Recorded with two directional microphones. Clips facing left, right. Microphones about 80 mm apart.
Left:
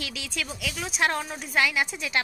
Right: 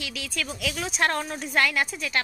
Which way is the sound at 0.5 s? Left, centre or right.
Centre.